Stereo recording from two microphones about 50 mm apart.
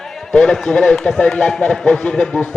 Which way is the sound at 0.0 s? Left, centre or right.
Centre.